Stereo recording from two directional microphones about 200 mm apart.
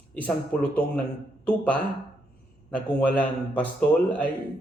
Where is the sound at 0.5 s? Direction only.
10° left (ahead or behind).